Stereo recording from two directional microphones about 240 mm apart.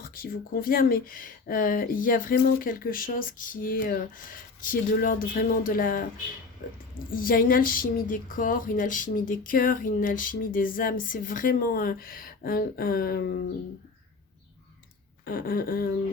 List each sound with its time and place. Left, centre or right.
0.0 s speech: left
15.2 s speech: left